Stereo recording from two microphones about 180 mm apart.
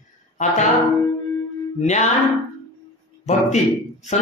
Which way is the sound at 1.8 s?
40° left (ahead or behind).